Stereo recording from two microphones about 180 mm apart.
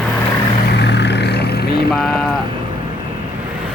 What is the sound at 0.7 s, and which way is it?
Vehicle, 70° left (ahead or behind).